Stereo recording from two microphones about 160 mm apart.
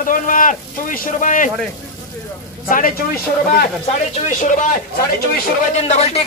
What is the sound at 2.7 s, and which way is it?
Speech, 55° left (ahead or behind).